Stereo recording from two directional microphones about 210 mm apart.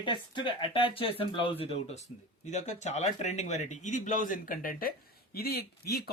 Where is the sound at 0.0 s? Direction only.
20° left (ahead or behind).